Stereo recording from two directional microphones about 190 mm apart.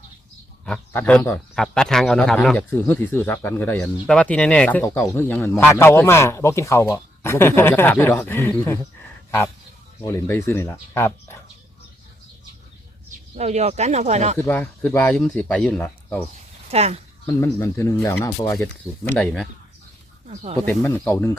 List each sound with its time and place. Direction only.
0.6 s speech: 5° left (ahead or behind)
10.0 s speech: 15° left (ahead or behind)
13.3 s speech: 35° right (ahead or behind)
14.3 s speech: 10° left (ahead or behind)
16.6 s speech: 35° right (ahead or behind)
17.2 s speech: 15° left (ahead or behind)
20.2 s speech: 35° right (ahead or behind)
20.7 s speech: 10° left (ahead or behind)